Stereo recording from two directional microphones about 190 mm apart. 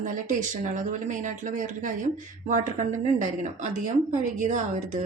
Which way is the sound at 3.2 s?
40° right (ahead or behind).